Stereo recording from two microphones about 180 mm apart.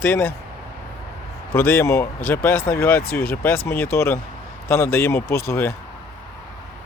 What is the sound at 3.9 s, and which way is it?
A man's voice, 15° left (ahead or behind).